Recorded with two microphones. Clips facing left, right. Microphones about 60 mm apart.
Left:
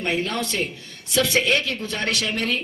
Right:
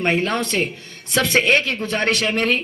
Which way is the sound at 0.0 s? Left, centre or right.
Right.